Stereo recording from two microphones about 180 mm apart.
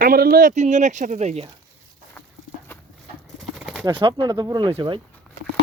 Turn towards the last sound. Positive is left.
turn(degrees=-30)  # may be behind; listen again after turning